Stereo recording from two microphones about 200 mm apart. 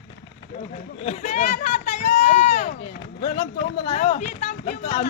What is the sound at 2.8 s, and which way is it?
Speech, 25° left (ahead or behind).